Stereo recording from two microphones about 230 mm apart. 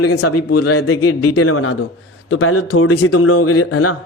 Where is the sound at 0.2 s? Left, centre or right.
Left.